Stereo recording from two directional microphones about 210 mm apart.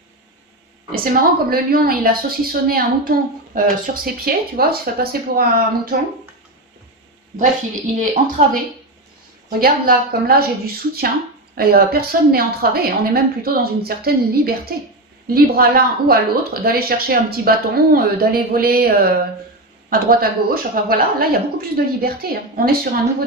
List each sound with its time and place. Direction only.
1.0 s a woman's voice: 45° right (ahead or behind)
8.0 s a woman's voice: 40° right (ahead or behind)